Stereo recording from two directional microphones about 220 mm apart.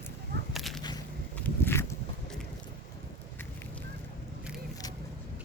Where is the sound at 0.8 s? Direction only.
20° left (ahead or behind).